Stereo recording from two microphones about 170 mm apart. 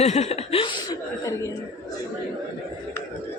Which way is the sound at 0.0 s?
40° left (ahead or behind).